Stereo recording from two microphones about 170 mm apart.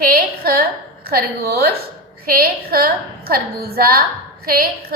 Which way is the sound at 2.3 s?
60° right (ahead or behind).